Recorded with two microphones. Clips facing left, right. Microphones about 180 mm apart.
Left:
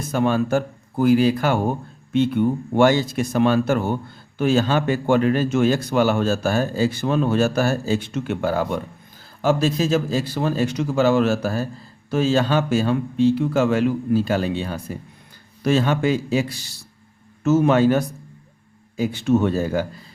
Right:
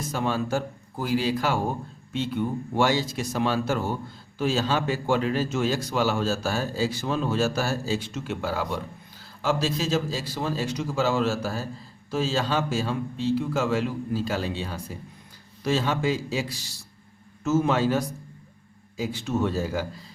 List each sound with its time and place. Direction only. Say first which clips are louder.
0.1 s a man's voice: left 7 dB; 55° left (ahead or behind)